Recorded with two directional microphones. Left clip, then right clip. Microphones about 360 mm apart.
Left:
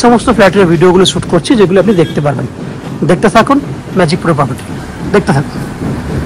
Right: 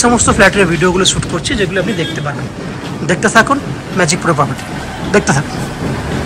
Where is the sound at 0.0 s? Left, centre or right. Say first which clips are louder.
Left 3 dB; centre.